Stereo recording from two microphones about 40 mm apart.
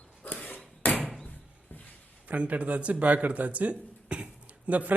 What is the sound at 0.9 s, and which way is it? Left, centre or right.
Door, centre.